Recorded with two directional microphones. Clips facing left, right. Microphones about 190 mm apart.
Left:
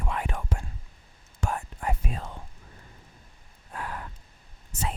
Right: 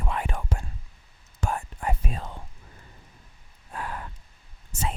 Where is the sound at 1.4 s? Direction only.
30° right (ahead or behind).